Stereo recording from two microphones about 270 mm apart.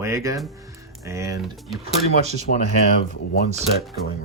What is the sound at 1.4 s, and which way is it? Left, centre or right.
Speech, centre.